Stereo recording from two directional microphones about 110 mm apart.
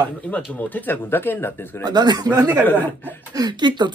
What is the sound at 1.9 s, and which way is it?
A man's voice, 40° right (ahead or behind).